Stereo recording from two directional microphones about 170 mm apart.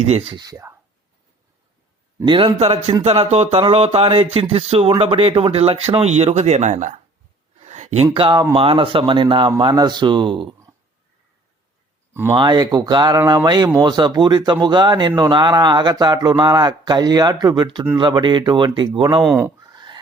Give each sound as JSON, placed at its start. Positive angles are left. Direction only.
{"t": 0.0, "sound": "speech", "side_deg": -35}
{"t": 2.1, "sound": "speech", "side_deg": -30}
{"t": 7.6, "sound": "a sound", "side_deg": -40}
{"t": 8.1, "sound": "speech", "side_deg": -30}
{"t": 12.3, "sound": "speech", "side_deg": -25}
{"t": 19.2, "sound": "speech", "side_deg": -5}
{"t": 19.5, "sound": "a sound", "side_deg": -25}